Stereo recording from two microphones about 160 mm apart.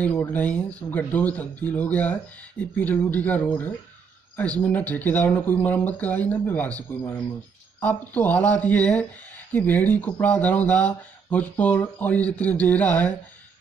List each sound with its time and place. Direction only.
0.0 s speech: 10° left (ahead or behind)